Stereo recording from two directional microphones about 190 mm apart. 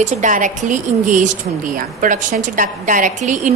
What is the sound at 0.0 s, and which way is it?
A woman's voice, 40° right (ahead or behind).